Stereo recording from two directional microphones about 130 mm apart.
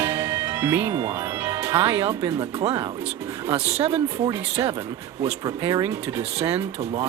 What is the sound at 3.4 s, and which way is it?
Speech, 45° right (ahead or behind).